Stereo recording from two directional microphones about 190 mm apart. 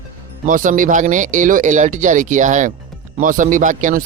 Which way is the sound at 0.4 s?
45° right (ahead or behind).